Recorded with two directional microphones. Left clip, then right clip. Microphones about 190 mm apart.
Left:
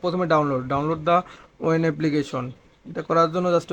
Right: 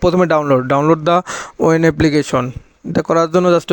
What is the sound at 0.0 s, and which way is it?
A man's voice, 45° right (ahead or behind).